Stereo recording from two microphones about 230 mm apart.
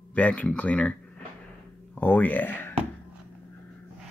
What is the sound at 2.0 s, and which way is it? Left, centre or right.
Speech, centre.